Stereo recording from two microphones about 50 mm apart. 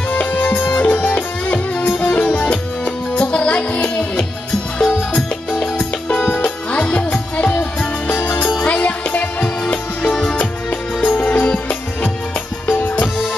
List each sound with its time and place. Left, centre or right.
0.1 s music: left
8.6 s music: left
11.1 s music: left